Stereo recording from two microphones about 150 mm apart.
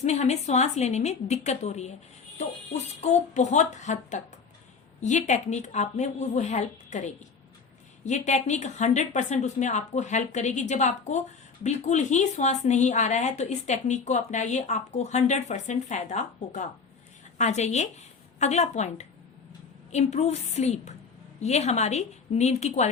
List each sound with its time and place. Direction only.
0.0 s speech: 50° left (ahead or behind)